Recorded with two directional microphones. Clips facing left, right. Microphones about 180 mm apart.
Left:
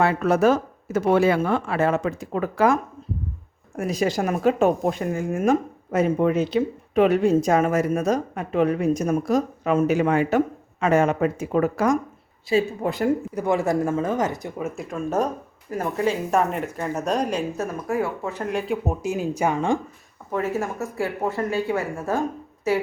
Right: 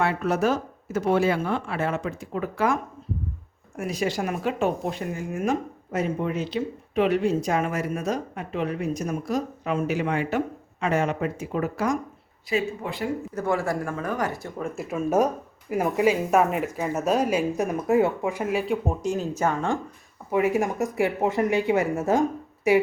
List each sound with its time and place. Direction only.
0.9 s speech: 65° left (ahead or behind); by 2.7 s 40° left (ahead or behind)
3.8 s speech: 40° left (ahead or behind)
12.5 s speech: 35° left (ahead or behind)
13.3 s speech: 20° left (ahead or behind)
14.6 s speech: 5° right (ahead or behind)
17.6 s speech: 20° right (ahead or behind); by 19.8 s 15° left (ahead or behind)
20.3 s speech: 15° right (ahead or behind)